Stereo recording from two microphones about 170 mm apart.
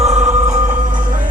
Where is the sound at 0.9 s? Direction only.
25° right (ahead or behind).